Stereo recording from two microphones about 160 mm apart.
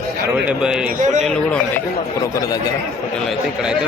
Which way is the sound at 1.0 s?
50° right (ahead or behind).